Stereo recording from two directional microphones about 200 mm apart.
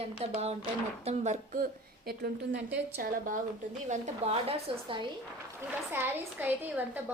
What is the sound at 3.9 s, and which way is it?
Speech, 35° right (ahead or behind).